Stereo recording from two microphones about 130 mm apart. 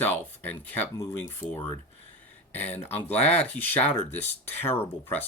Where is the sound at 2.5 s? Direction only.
15° left (ahead or behind).